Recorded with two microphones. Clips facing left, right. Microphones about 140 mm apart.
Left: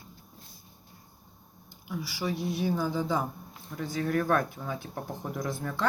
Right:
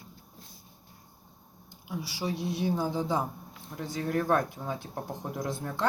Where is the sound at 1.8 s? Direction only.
25° right (ahead or behind).